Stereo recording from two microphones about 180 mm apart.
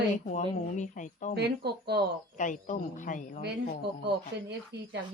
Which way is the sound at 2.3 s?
45° left (ahead or behind).